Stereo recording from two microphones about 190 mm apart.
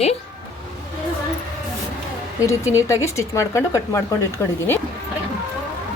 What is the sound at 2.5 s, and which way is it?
Speech, 15° left (ahead or behind).